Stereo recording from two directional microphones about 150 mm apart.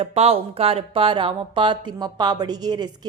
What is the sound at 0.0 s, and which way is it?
Speech, 45° right (ahead or behind).